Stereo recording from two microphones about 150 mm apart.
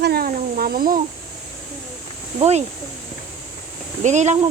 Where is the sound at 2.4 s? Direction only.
45° right (ahead or behind).